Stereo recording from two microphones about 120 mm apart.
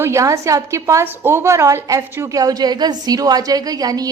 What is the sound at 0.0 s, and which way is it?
A woman's voice, 25° right (ahead or behind).